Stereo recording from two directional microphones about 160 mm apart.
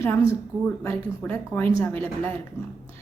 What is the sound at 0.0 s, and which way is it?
A woman's voice, 15° left (ahead or behind).